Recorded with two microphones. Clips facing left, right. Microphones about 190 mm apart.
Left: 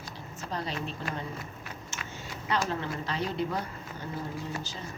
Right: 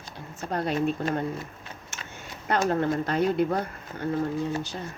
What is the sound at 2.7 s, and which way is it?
Speech, 50° right (ahead or behind).